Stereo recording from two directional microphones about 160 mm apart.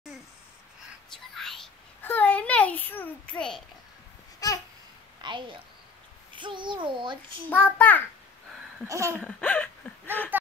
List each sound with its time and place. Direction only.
1.3 s whispering: centre (ahead or behind)
2.0 s a sound: 10° left (ahead or behind)
4.4 s babbling: 20° left (ahead or behind)
5.2 s a child's voice: 30° right (ahead or behind)
7.4 s a child's voice: 15° left (ahead or behind)
8.8 s speech: 20° right (ahead or behind)
9.2 s speech: 5° left (ahead or behind)
10.3 s a sound: 10° right (ahead or behind)